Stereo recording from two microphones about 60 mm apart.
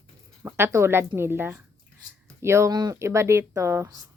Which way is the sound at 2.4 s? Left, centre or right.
Right.